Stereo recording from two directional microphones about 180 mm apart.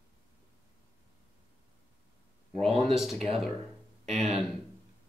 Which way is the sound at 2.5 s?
35° right (ahead or behind).